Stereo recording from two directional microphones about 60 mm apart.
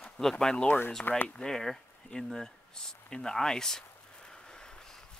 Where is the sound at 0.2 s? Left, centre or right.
Centre.